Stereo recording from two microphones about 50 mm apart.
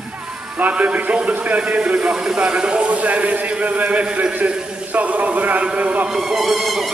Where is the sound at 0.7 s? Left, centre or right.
Right.